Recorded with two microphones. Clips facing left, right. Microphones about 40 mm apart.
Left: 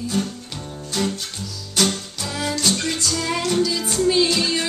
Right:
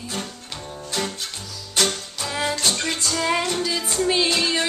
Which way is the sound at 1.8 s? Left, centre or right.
Centre.